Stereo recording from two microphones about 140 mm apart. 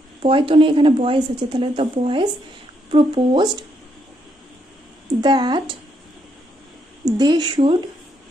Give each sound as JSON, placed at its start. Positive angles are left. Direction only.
{"t": 0.2, "sound": "speech", "side_deg": -40}
{"t": 5.2, "sound": "speech", "side_deg": -30}
{"t": 7.1, "sound": "speech", "side_deg": -30}